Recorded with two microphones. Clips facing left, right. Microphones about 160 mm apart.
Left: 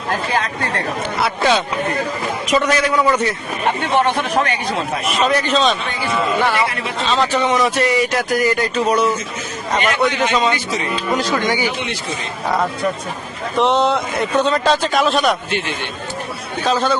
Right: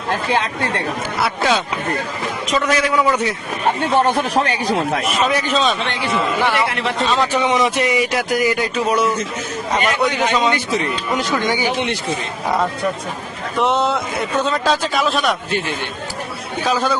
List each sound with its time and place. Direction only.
1.2 s a man's voice: centre (ahead or behind)
2.6 s a man's voice: centre (ahead or behind)
3.8 s speech: 35° right (ahead or behind)
5.0 s a man's voice: centre (ahead or behind)
7.0 s speech: 10° right (ahead or behind)
13.6 s a man's voice: 10° right (ahead or behind)
16.6 s speech: 5° right (ahead or behind)